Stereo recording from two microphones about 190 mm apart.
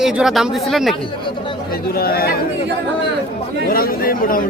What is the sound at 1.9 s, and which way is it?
Speech, 55° left (ahead or behind).